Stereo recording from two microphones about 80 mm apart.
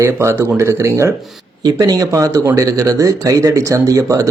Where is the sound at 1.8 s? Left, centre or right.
Right.